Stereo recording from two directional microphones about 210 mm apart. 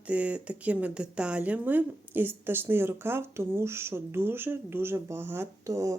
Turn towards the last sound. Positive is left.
turn(degrees=-15)  # may be behind; listen again after turning